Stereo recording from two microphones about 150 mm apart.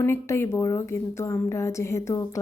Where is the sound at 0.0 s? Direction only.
15° left (ahead or behind).